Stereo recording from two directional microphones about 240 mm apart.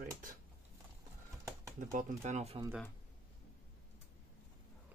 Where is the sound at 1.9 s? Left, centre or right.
Right.